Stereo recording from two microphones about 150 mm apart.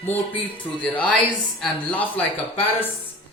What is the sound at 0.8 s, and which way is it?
Speech, 10° left (ahead or behind).